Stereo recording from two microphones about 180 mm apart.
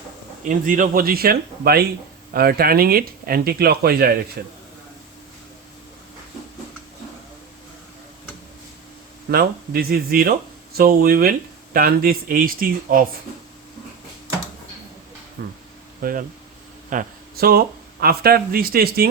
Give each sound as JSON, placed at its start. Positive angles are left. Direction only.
{"t": 0.4, "sound": "speech", "side_deg": -50}
{"t": 9.3, "sound": "speech", "side_deg": -60}
{"t": 15.4, "sound": "speech", "side_deg": -60}